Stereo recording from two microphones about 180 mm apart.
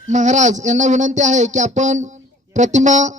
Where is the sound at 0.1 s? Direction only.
40° right (ahead or behind).